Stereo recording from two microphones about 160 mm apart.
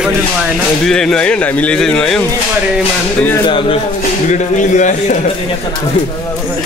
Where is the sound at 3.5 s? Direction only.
30° left (ahead or behind).